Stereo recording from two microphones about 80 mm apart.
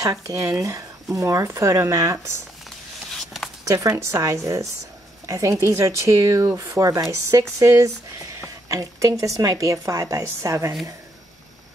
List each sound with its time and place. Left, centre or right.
0.0 s speech: right
3.1 s a sound: centre
3.6 s speech: right